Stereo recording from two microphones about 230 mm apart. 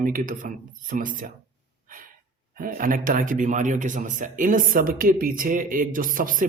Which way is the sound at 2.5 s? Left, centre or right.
Right.